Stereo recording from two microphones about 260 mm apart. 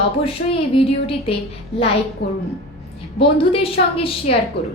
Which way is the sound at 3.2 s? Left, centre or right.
Left.